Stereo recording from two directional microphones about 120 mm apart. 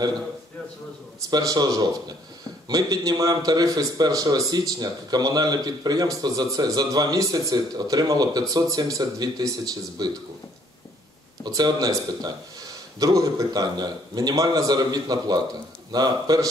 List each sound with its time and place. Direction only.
1.3 s a man's voice: 30° right (ahead or behind)
11.4 s a man's voice: 35° right (ahead or behind)